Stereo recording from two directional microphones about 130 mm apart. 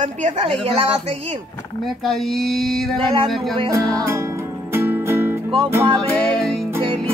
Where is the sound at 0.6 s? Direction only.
50° right (ahead or behind).